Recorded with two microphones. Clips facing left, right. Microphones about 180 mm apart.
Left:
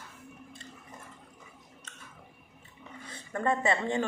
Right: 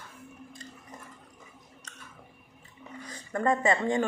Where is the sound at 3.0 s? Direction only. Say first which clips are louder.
Right 3 dB; 35° right (ahead or behind).